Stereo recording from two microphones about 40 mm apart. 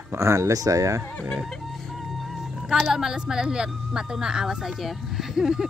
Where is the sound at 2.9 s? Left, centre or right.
Centre.